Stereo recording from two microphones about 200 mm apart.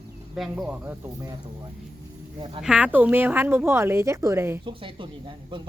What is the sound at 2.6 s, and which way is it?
A woman's voice, 5° right (ahead or behind).